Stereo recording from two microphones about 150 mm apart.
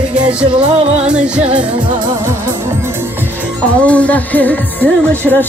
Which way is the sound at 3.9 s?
10° left (ahead or behind).